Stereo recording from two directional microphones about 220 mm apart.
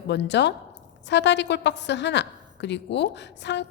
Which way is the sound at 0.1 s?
50° left (ahead or behind).